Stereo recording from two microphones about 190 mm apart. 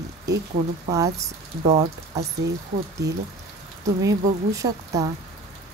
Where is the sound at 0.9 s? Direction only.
20° right (ahead or behind).